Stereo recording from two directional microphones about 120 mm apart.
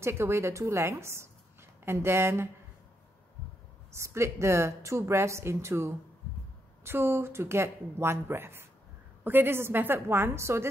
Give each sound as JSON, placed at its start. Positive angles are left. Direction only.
{"t": 0.0, "sound": "a woman's voice", "side_deg": -20}
{"t": 3.9, "sound": "a woman's voice", "side_deg": -20}